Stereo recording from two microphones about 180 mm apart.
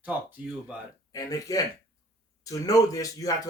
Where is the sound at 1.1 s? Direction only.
20° left (ahead or behind).